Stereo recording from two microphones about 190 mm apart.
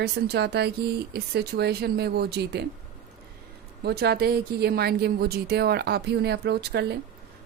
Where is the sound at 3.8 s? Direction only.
55° right (ahead or behind).